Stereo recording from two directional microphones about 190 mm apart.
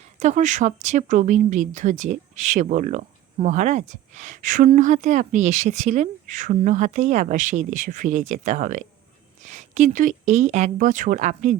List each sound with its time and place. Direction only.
0.2 s a woman's voice: 40° right (ahead or behind)